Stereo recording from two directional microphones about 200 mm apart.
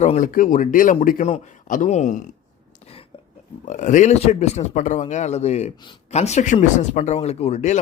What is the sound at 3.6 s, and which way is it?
Speech, 35° left (ahead or behind).